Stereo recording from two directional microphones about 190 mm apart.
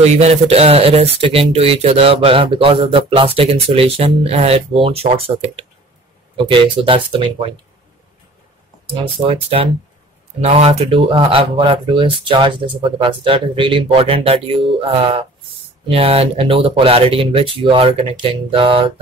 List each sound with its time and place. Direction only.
0.0 s speech: 35° right (ahead or behind)
9.3 s speech: 30° right (ahead or behind)